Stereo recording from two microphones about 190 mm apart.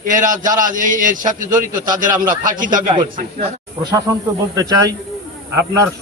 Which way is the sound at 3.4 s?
25° right (ahead or behind).